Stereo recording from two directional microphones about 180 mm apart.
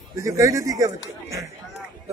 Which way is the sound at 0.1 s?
15° right (ahead or behind).